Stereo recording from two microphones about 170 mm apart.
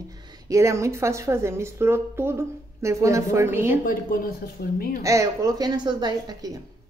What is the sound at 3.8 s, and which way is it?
Speech, 60° left (ahead or behind).